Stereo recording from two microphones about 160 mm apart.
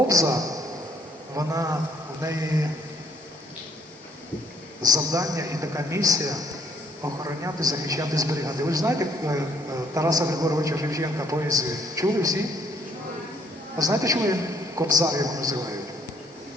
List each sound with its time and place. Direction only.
0.1 s a man's voice: 20° right (ahead or behind)
1.4 s a man's voice: 20° right (ahead or behind)
4.8 s a man's voice: 20° right (ahead or behind)
13.7 s a man's voice: 20° right (ahead or behind)